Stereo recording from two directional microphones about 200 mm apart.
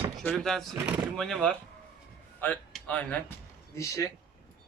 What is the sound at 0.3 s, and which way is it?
Speech, centre (ahead or behind).